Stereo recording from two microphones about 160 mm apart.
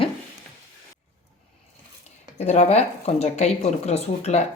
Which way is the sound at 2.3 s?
45° left (ahead or behind).